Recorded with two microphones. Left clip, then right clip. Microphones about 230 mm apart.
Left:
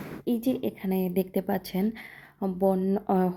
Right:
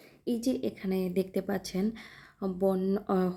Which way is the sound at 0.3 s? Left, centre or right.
Centre.